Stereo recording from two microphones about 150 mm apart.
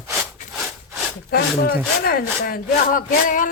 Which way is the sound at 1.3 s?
90° left.